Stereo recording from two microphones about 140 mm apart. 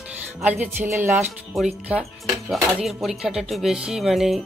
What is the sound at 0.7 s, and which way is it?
Speech, 15° right (ahead or behind).